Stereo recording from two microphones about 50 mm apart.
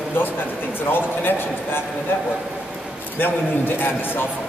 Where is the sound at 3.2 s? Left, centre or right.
Left.